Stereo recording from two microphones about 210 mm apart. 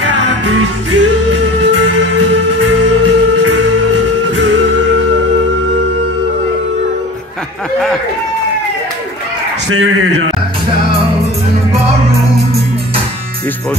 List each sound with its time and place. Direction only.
0.9 s music: 60° right (ahead or behind); by 3.6 s 85° right
9.7 s speech: 75° right (ahead or behind)